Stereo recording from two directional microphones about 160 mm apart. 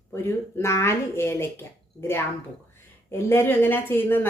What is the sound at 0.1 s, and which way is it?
Speech, 15° left (ahead or behind).